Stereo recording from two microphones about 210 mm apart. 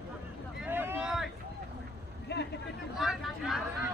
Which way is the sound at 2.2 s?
55° left (ahead or behind).